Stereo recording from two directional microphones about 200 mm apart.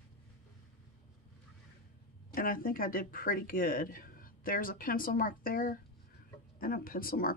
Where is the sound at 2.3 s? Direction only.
45° left (ahead or behind).